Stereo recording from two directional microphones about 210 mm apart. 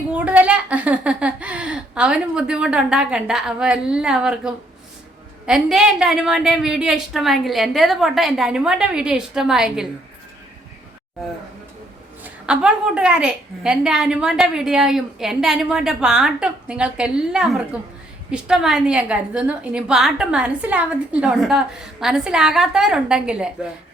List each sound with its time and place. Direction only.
0.1 s a woman's voice: 5° right (ahead or behind)
12.2 s a woman's voice: 5° right (ahead or behind)